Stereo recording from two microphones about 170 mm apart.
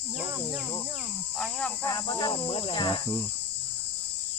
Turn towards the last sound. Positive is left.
turn(degrees=30)  # may be behind; listen again after turning